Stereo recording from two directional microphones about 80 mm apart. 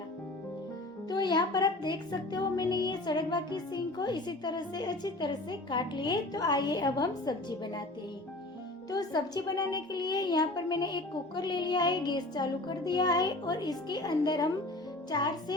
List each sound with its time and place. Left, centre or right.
1.1 s speech: left
8.9 s speech: left